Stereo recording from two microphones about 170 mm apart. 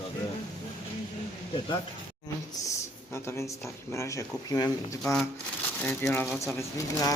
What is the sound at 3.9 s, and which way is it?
Speech, 15° left (ahead or behind).